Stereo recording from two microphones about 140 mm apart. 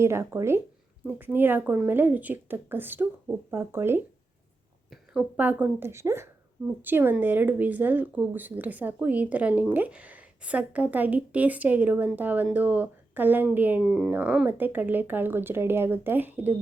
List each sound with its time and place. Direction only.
0.0 s speech: 20° right (ahead or behind)
5.4 s speech: 10° right (ahead or behind)